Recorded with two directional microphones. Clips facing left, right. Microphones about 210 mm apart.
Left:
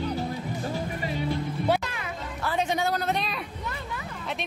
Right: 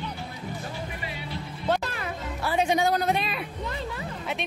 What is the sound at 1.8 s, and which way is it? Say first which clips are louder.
Music: right 2 dB; 40° right (ahead or behind).